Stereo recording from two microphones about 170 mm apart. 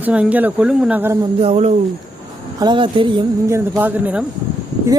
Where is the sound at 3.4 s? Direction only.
15° right (ahead or behind).